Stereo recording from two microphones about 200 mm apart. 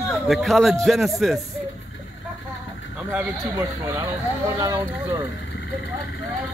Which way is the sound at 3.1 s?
15° right (ahead or behind).